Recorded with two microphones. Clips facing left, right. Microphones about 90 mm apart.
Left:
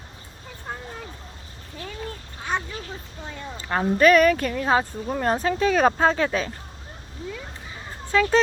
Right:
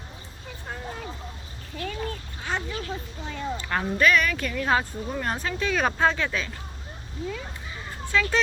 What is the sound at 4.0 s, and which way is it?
Speech, 40° left (ahead or behind).